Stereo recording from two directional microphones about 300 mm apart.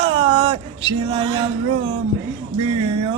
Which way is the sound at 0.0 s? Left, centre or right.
Centre.